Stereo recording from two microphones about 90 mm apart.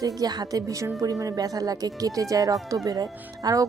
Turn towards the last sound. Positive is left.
turn(degrees=-40)  # may be behind; listen again after turning